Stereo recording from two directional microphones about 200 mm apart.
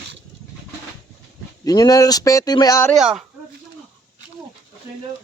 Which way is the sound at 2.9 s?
Centre (ahead or behind).